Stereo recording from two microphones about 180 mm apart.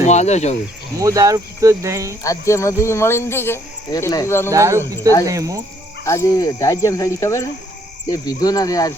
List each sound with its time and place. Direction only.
0.0 s speech: 40° left (ahead or behind)
0.9 s speech: 20° right (ahead or behind)
2.2 s speech: 15° left (ahead or behind)
4.5 s speech: 15° right (ahead or behind)
6.1 s speech: 20° left (ahead or behind)